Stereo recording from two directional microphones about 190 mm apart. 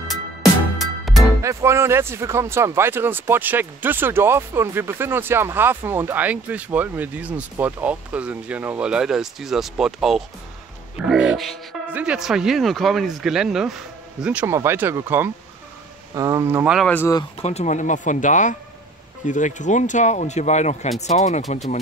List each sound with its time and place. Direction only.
0.1 s music: centre (ahead or behind)
1.4 s speech: 15° right (ahead or behind)
16.7 s speech: 5° left (ahead or behind)
17.4 s speech: 35° left (ahead or behind)